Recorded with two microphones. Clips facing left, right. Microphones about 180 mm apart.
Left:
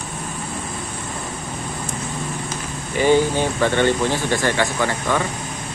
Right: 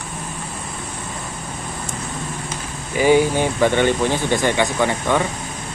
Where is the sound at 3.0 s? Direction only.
15° right (ahead or behind).